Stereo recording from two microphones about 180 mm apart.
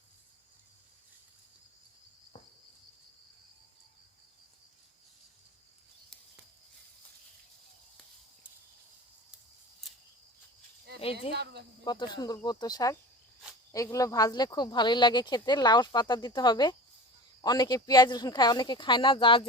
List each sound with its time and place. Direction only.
11.0 s speech: 30° left (ahead or behind)
11.3 s speech: 65° right (ahead or behind)
11.9 s speech: 25° left (ahead or behind)